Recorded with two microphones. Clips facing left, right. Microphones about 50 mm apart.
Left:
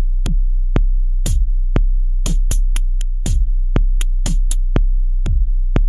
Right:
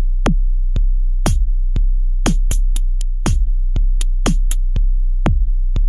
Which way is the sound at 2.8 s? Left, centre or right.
Left.